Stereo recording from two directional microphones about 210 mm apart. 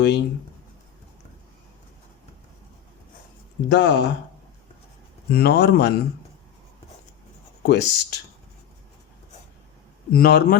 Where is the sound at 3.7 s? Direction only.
55° left (ahead or behind).